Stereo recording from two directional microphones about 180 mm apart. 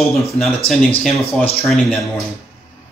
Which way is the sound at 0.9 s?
35° left (ahead or behind).